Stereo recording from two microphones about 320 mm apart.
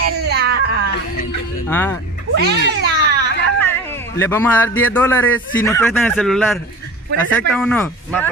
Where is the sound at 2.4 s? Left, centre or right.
Right.